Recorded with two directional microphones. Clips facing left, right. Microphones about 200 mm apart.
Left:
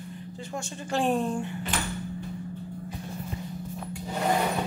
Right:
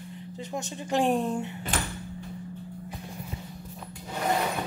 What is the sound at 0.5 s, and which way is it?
Speech, 15° right (ahead or behind).